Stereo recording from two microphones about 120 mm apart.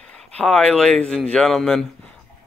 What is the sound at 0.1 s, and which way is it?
Speech, 10° left (ahead or behind).